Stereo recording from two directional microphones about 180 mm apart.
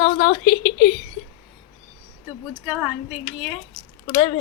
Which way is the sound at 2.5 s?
5° right (ahead or behind).